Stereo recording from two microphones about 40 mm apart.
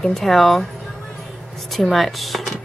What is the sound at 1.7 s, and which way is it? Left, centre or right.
Speech, centre.